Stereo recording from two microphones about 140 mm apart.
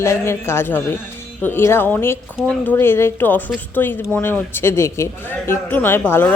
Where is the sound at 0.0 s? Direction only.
20° left (ahead or behind).